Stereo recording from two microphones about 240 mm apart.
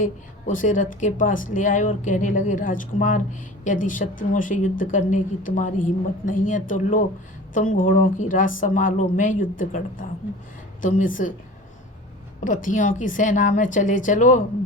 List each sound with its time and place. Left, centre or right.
0.0 s speech: left
12.5 s speech: left